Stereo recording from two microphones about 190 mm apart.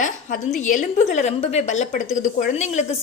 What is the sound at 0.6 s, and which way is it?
A woman's voice, 40° left (ahead or behind).